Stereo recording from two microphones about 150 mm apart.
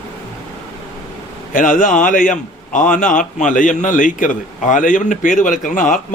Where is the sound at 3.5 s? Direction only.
60° left (ahead or behind).